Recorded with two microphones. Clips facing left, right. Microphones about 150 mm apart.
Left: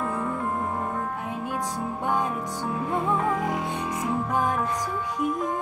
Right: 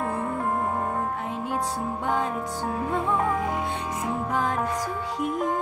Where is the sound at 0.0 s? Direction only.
40° right (ahead or behind).